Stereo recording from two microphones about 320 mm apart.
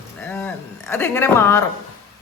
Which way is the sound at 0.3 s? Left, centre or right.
Centre.